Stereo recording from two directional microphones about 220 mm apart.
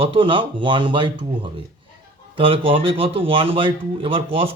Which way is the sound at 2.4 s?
25° right (ahead or behind).